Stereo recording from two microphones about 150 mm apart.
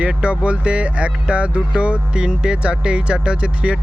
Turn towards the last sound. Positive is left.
turn(degrees=-5)  # may be behind; listen again after turning